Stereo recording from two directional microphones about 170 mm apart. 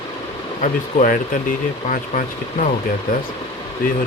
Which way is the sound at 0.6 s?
45° left (ahead or behind).